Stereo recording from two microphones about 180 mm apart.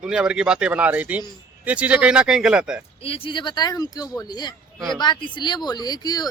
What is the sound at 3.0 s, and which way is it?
Speech, 30° left (ahead or behind).